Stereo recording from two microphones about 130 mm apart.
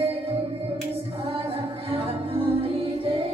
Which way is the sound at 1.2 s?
45° right (ahead or behind).